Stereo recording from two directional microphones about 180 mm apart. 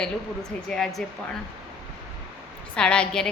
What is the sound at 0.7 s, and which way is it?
Speech, centre (ahead or behind).